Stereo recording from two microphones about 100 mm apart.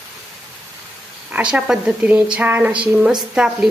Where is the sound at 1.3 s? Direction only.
15° right (ahead or behind).